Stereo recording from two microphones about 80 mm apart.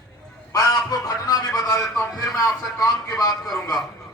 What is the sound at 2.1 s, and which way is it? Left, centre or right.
A man's voice, left.